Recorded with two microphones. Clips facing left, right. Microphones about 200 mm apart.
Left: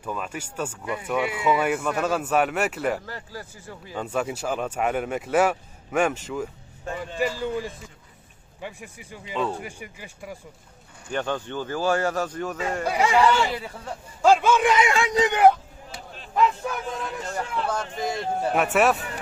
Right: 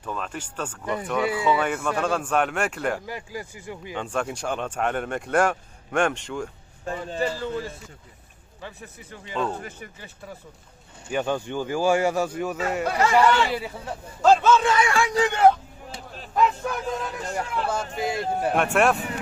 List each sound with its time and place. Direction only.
0.0 s speech: 10° left (ahead or behind)
3.1 s speech: 15° right (ahead or behind)
3.9 s speech: 5° left (ahead or behind)
11.1 s speech: 10° right (ahead or behind)
12.8 s speech: 10° left (ahead or behind)
13.5 s speech: 10° right (ahead or behind)
14.2 s speech: 10° left (ahead or behind)
16.6 s speech: centre (ahead or behind)